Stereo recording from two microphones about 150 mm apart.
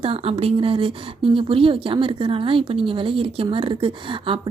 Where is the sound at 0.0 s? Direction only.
40° right (ahead or behind).